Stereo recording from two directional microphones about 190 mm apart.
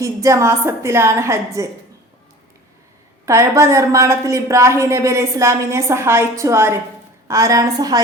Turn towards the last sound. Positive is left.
turn(degrees=-20)  # may be behind; listen again after turning